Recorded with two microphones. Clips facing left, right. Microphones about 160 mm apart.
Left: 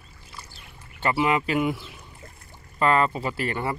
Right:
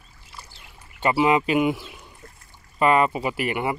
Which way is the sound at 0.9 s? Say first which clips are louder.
Right 3 dB; 15° right (ahead or behind).